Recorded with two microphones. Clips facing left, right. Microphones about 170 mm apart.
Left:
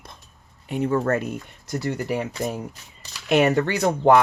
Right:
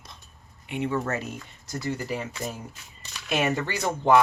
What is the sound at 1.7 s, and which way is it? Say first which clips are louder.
Speech: left 5 dB; 65° left (ahead or behind).